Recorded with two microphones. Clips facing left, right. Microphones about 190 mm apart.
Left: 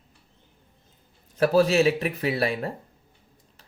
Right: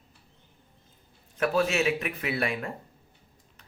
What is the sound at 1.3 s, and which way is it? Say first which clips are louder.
Speech: left 6 dB; 35° left (ahead or behind).